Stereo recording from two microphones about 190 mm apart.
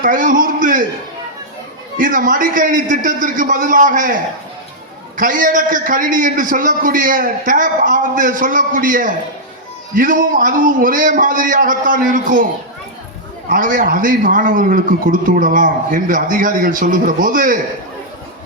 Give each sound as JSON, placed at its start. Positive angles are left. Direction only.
{"t": 0.0, "sound": "a man's voice", "side_deg": -45}
{"t": 2.0, "sound": "a man's voice", "side_deg": -45}
{"t": 13.5, "sound": "a man's voice", "side_deg": -45}